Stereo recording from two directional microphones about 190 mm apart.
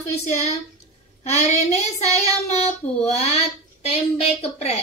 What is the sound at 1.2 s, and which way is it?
Child singing, 35° left (ahead or behind).